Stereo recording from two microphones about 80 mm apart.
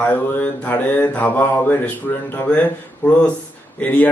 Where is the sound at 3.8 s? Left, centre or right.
Centre.